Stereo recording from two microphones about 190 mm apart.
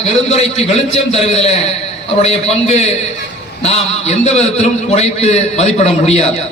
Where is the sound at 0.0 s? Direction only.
35° left (ahead or behind).